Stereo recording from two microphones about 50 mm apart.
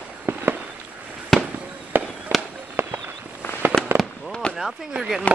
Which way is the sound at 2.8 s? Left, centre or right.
Right.